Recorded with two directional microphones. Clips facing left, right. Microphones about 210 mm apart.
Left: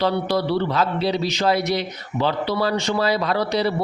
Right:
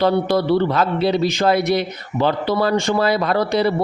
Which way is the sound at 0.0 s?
50° right (ahead or behind).